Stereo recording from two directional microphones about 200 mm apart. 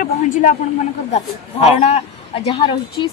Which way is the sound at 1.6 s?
35° left (ahead or behind).